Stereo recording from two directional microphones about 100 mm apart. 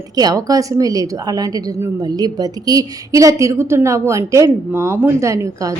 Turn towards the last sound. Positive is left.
turn(degrees=-35)  # may be behind; listen again after turning